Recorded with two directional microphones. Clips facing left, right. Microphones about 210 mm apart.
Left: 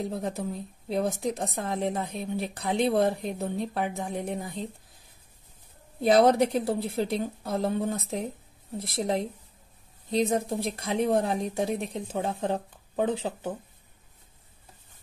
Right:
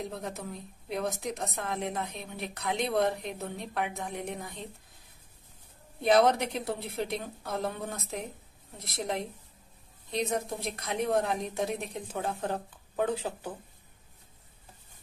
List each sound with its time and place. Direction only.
0.1 s a woman's voice: 30° left (ahead or behind)
6.0 s a woman's voice: 35° left (ahead or behind)